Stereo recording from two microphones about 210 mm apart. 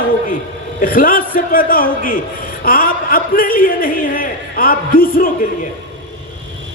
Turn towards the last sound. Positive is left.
turn(degrees=40)  # may be behind; listen again after turning